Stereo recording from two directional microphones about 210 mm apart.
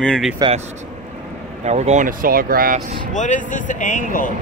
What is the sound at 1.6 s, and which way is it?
Speech, 30° right (ahead or behind).